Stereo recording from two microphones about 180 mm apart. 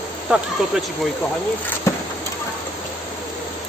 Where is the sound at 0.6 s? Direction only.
Centre (ahead or behind).